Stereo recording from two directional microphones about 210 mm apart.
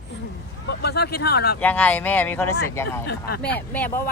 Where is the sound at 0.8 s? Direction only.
50° left (ahead or behind).